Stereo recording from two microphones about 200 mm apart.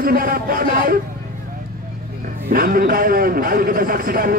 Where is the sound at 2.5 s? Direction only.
45° right (ahead or behind).